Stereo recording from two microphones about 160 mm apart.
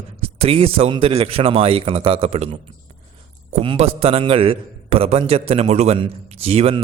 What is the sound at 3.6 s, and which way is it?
A man's voice, 35° right (ahead or behind).